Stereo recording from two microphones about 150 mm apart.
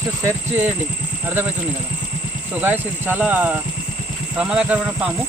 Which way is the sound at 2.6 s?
15° right (ahead or behind).